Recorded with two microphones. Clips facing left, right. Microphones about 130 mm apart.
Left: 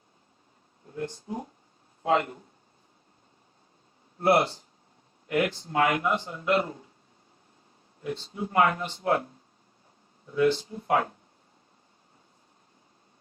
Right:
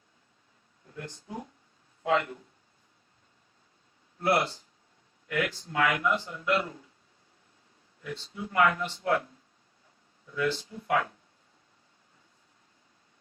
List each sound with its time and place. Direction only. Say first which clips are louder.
0.9 s a man's voice: left 6 dB; 35° left (ahead or behind)
4.3 s a man's voice: left 4 dB; 30° left (ahead or behind)
8.0 s a man's voice: left 5 dB; 35° left (ahead or behind)